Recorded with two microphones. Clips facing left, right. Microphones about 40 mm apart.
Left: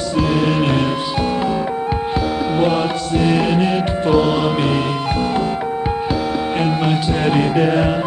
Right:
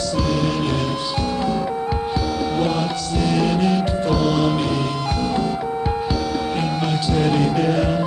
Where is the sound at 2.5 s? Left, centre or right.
Left.